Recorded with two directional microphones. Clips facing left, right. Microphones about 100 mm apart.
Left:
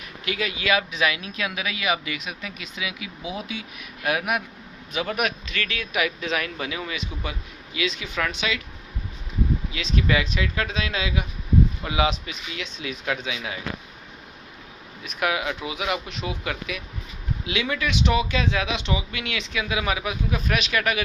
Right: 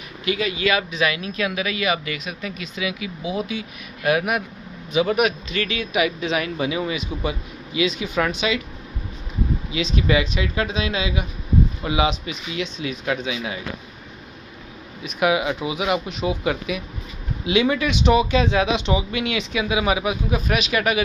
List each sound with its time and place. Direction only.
0.3 s a man's voice: centre (ahead or behind)
5.5 s speech: 20° right (ahead or behind)
5.9 s a man's voice: 10° right (ahead or behind)
9.7 s a man's voice: 10° right (ahead or behind)
15.2 s a man's voice: 15° right (ahead or behind)